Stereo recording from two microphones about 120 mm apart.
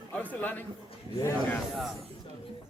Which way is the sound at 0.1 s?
15° left (ahead or behind).